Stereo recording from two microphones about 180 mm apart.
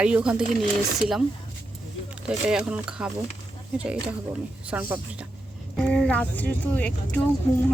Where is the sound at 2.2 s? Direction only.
5° right (ahead or behind).